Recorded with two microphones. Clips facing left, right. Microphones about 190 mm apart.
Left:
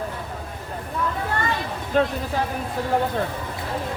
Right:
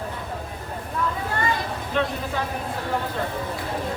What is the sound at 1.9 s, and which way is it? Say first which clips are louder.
Speech: left 4 dB; 45° left (ahead or behind).